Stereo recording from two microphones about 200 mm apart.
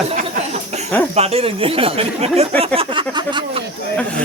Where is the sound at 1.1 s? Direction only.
30° right (ahead or behind).